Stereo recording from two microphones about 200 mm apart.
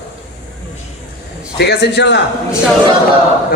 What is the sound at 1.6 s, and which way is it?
Speech, 55° left (ahead or behind).